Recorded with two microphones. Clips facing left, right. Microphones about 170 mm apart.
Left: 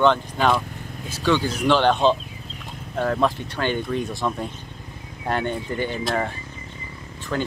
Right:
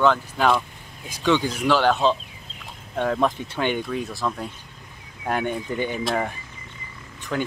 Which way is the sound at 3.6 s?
15° right (ahead or behind).